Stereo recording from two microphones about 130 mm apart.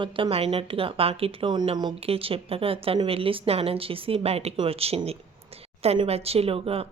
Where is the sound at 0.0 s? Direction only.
45° right (ahead or behind).